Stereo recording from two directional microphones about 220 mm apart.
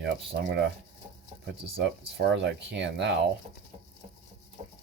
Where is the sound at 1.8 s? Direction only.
50° right (ahead or behind).